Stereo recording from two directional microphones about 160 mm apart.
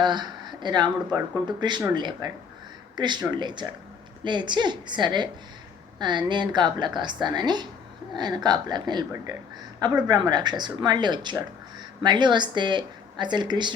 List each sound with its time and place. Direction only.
0.0 s a woman's voice: 25° right (ahead or behind)